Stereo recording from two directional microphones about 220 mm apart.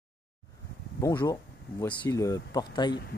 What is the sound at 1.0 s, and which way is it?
Speech, 15° left (ahead or behind).